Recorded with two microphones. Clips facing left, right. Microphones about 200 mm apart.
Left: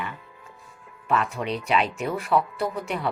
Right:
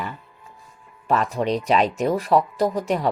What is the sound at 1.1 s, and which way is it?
Speech, 35° right (ahead or behind).